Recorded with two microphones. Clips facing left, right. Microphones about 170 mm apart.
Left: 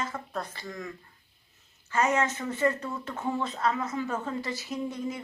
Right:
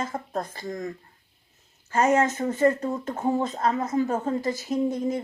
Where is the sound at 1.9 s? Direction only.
45° right (ahead or behind).